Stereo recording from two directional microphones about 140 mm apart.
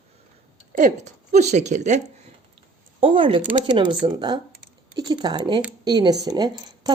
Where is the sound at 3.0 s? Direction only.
40° right (ahead or behind).